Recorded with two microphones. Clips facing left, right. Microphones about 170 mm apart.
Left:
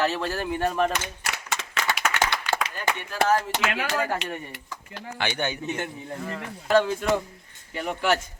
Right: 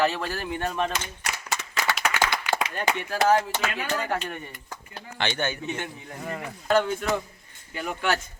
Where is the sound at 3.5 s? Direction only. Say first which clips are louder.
Left 2 dB; 80° left.